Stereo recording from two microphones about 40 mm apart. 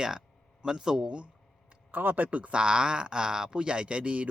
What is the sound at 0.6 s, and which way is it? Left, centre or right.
Speech, centre.